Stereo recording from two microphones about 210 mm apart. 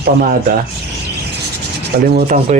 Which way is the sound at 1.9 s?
50° right (ahead or behind).